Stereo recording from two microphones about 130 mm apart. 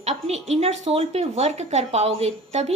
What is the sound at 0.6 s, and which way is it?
A woman's voice, 50° right (ahead or behind).